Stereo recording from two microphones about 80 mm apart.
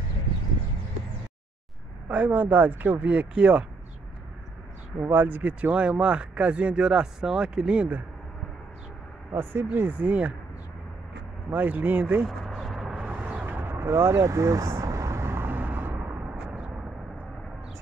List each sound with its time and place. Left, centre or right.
2.0 s speech: centre
4.9 s speech: right
9.3 s speech: right
11.5 s speech: right
12.3 s vehicle: centre